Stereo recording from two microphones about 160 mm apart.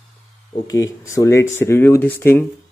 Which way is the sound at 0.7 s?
20° left (ahead or behind).